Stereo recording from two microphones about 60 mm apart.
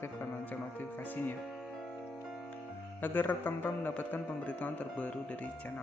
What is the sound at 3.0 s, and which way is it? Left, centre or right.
Speech, left.